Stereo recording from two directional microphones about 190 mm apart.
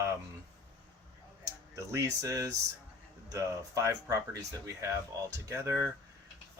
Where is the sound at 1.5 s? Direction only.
15° right (ahead or behind).